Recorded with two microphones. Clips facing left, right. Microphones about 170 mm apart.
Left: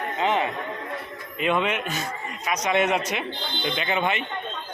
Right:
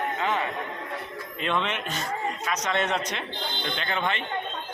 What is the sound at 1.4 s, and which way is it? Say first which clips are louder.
A man's voice: left 4 dB; 10° left (ahead or behind).